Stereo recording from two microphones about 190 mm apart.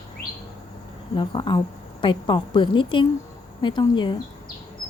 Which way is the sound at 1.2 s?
25° left (ahead or behind).